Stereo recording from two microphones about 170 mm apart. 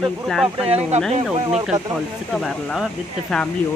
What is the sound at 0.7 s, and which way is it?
Speech, 40° right (ahead or behind).